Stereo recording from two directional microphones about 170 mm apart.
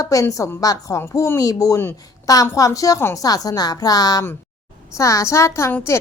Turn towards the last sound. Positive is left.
turn(degrees=15)  # may be behind; listen again after turning